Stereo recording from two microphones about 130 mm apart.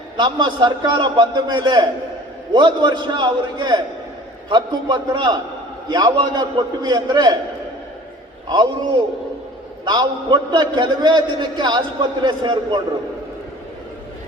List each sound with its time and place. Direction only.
0.2 s a man's voice: 35° right (ahead or behind)
8.4 s a man's voice: 35° right (ahead or behind)
9.8 s a man's voice: 35° right (ahead or behind)